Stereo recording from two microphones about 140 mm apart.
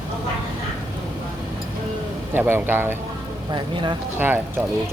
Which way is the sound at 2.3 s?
15° right (ahead or behind).